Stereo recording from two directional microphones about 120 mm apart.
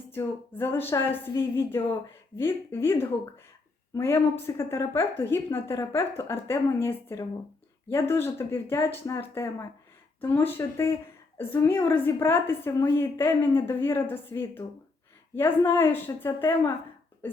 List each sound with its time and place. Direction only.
0.1 s a woman's voice: 20° left (ahead or behind)